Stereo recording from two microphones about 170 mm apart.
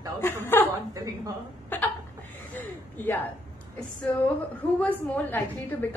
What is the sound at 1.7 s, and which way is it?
Hiccup, 10° left (ahead or behind).